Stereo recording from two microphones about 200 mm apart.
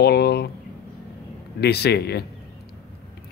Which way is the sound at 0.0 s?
55° left (ahead or behind).